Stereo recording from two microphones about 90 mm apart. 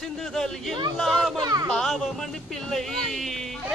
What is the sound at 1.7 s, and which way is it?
Speech, 5° left (ahead or behind).